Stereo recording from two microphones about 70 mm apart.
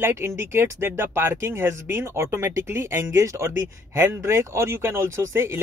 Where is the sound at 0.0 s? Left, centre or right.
Right.